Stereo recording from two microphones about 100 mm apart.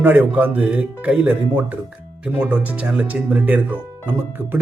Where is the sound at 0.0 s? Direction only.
20° right (ahead or behind).